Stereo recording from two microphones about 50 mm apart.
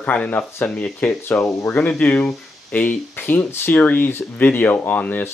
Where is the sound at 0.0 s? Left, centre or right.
Left.